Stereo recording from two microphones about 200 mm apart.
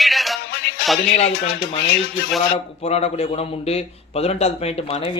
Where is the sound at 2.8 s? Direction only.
30° left (ahead or behind).